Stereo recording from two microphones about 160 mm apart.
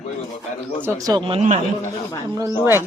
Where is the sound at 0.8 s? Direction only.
20° right (ahead or behind).